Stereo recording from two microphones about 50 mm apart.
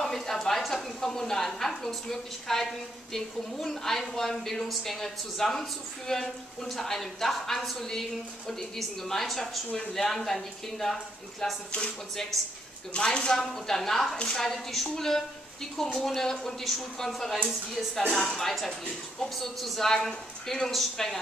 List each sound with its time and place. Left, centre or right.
0.0 s a woman's voice: centre
12.9 s a woman's voice: centre
14.1 s a woman's voice: centre
14.4 s a woman's voice: centre